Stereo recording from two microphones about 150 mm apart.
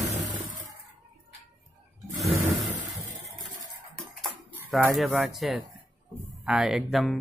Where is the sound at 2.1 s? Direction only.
Centre (ahead or behind).